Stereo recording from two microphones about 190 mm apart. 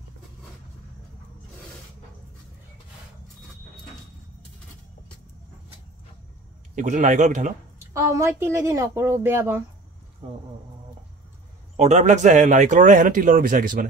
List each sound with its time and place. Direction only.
6.7 s speech: 40° right (ahead or behind)
7.9 s speech: 15° right (ahead or behind)
11.7 s speech: 35° right (ahead or behind)